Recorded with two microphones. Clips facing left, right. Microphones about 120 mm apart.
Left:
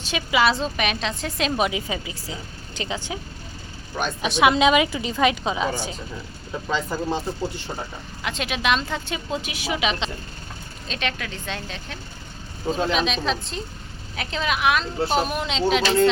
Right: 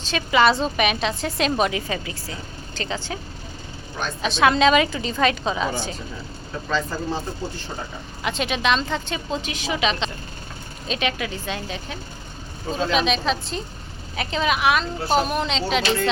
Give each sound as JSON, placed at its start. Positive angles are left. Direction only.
{"t": 0.0, "sound": "a woman's voice", "side_deg": 10}
{"t": 8.2, "sound": "a woman's voice", "side_deg": 0}
{"t": 10.8, "sound": "a woman's voice", "side_deg": -5}